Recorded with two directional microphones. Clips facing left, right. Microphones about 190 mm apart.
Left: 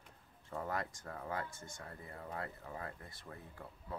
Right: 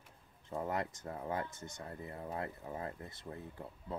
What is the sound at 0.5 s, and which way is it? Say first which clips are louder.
Speech: right 3 dB; 20° right (ahead or behind).